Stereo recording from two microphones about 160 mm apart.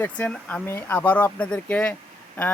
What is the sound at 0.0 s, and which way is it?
Speech, 10° left (ahead or behind).